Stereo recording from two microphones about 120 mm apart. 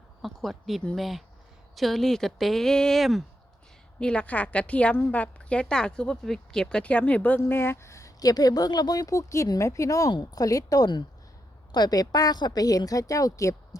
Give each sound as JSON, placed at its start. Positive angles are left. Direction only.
{"t": 0.2, "sound": "a woman's voice", "side_deg": 0}